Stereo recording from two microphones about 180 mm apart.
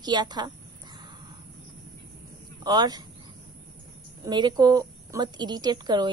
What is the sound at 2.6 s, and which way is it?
Speech, 20° right (ahead or behind).